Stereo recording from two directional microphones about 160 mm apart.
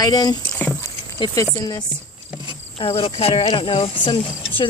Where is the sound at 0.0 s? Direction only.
25° left (ahead or behind).